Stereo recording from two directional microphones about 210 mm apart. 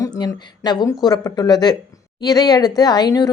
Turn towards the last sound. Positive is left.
turn(degrees=20)  # may be behind; listen again after turning